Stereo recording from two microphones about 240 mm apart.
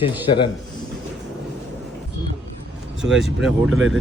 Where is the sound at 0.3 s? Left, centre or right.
Centre.